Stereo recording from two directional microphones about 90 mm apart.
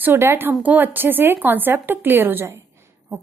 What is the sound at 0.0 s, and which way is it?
A woman's voice, 25° right (ahead or behind).